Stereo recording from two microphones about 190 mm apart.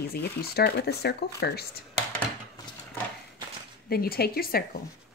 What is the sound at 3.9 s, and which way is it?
Speech, 55° left (ahead or behind).